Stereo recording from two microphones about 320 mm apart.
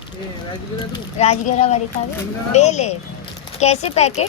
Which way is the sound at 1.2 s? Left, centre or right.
Centre.